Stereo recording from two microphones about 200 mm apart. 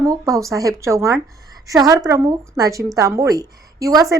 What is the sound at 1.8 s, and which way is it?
A woman's voice, 20° right (ahead or behind).